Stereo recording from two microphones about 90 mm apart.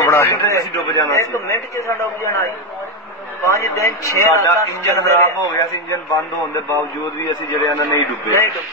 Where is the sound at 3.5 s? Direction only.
35° left (ahead or behind).